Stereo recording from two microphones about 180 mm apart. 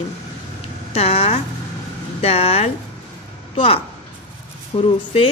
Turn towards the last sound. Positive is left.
turn(degrees=30)  # may be behind; listen again after turning